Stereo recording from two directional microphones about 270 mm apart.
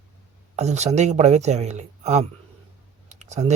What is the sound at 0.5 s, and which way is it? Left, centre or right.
Speech, right.